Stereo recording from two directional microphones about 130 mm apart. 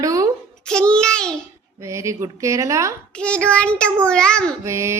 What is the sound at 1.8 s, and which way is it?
Speech, 20° right (ahead or behind).